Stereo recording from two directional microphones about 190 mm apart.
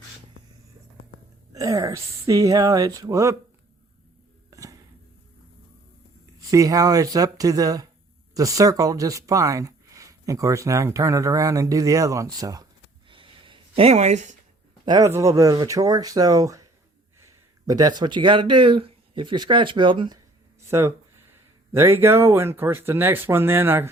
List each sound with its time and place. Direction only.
1.5 s speech: 15° right (ahead or behind)
4.5 s music: 15° right (ahead or behind)
6.5 s speech: 20° right (ahead or behind)
13.1 s a sound: 25° right (ahead or behind)
14.8 s speech: 15° right (ahead or behind)
20.7 s speech: 15° right (ahead or behind)